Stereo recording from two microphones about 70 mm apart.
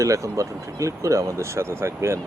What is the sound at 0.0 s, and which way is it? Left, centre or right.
Speech, right.